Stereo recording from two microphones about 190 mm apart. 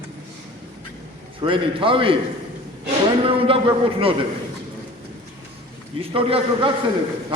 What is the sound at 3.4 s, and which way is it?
Speech, 30° right (ahead or behind).